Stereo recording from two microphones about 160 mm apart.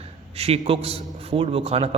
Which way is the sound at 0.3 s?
40° right (ahead or behind).